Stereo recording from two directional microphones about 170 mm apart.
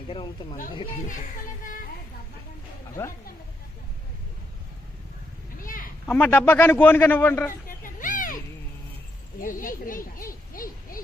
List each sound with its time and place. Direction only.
0.1 s speech: 30° left (ahead or behind)
1.0 s speech: 50° left (ahead or behind)
3.0 s a man's voice: 15° left (ahead or behind)
5.6 s a sound: 55° left (ahead or behind)
6.1 s a man's voice: 10° left (ahead or behind)
7.7 s children playing: 50° left (ahead or behind)
9.4 s speech: 55° left (ahead or behind)
10.5 s hoot: 55° left (ahead or behind)